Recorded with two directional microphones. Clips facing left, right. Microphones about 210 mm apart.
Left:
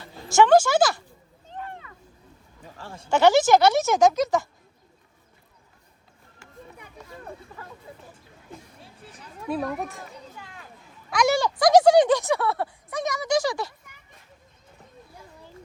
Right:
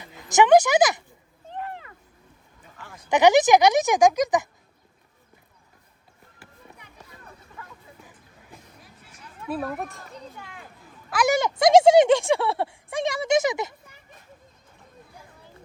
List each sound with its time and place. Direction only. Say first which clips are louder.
0.3 s speech: right 1 dB; 20° right (ahead or behind)
2.6 s a sound: left 5 dB; 30° left (ahead or behind)
3.1 s speech: right 1 dB; 15° right (ahead or behind)
7.5 s hubbub: left 2 dB; 40° left (ahead or behind)
9.5 s speech: left 1 dB; 5° right (ahead or behind)
11.3 s speech: right 2 dB; 20° right (ahead or behind)